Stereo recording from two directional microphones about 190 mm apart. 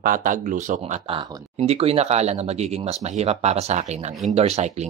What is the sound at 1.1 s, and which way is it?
Speech, 25° right (ahead or behind).